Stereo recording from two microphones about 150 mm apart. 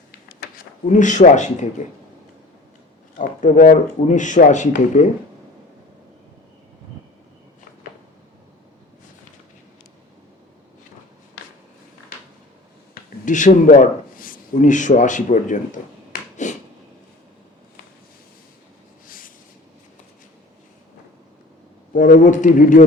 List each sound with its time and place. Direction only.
0.3 s speech: 65° left (ahead or behind)
3.2 s speech: 60° left (ahead or behind)
12.9 s a man's voice: 55° left (ahead or behind)
16.4 s a sound: 55° left (ahead or behind)
19.0 s a sound: 65° left (ahead or behind)
21.9 s speech: 60° left (ahead or behind)